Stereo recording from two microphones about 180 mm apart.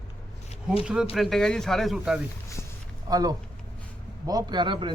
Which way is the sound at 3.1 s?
20° right (ahead or behind).